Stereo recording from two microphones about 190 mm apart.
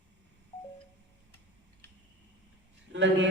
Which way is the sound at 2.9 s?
70° right (ahead or behind).